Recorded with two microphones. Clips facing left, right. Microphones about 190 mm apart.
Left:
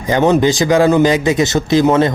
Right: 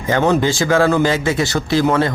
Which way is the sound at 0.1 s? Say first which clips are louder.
Left 4 dB; 20° left (ahead or behind).